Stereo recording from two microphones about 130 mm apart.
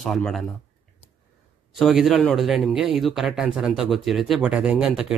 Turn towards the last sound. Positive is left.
turn(degrees=-5)  # may be behind; listen again after turning